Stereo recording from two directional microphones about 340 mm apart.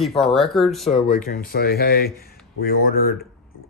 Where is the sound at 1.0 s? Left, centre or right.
Left.